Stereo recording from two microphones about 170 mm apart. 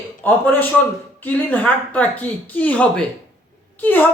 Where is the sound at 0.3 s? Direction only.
10° left (ahead or behind).